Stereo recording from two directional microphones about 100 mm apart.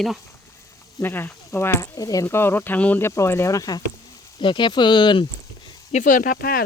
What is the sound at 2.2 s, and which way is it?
Speech, 20° left (ahead or behind).